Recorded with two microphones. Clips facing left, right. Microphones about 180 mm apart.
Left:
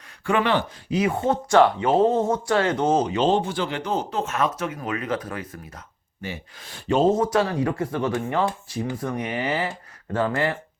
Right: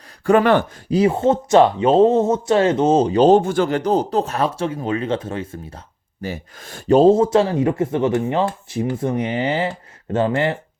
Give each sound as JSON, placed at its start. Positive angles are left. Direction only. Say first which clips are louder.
{"t": 0.3, "sound": "speech", "louder": "right 7 dB", "side_deg": -45}
{"t": 0.9, "sound": "speech", "louder": "right 6 dB", "side_deg": -25}
{"t": 6.2, "sound": "speech", "louder": "right 6 dB", "side_deg": -45}